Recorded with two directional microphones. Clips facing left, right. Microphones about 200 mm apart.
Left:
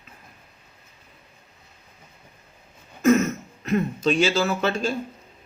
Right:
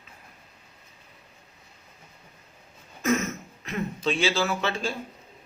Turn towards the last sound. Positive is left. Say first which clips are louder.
# left 4 dB
turn(degrees=40)  # may be behind; listen again after turning